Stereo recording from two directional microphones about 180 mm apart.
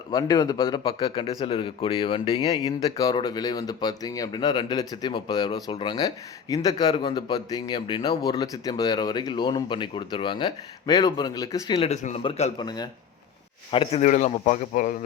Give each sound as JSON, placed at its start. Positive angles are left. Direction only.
{"t": 0.1, "sound": "speech", "side_deg": 20}
{"t": 2.8, "sound": "speech", "side_deg": 20}
{"t": 11.8, "sound": "a man's voice", "side_deg": 35}
{"t": 14.0, "sound": "speech", "side_deg": 40}